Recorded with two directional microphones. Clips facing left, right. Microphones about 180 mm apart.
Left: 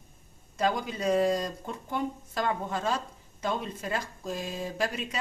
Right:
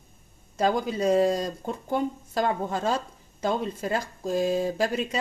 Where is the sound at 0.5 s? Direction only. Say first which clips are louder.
Right 4 dB; 35° right (ahead or behind).